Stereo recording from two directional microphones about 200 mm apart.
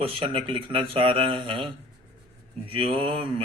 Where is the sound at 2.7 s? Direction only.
25° right (ahead or behind).